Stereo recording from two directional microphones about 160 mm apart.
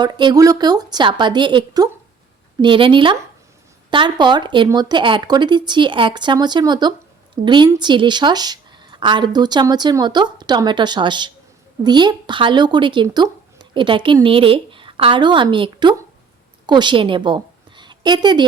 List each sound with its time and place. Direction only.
0.0 s a woman's voice: 25° right (ahead or behind)